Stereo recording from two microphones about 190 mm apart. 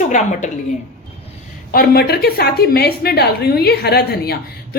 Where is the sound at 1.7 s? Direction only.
50° left (ahead or behind).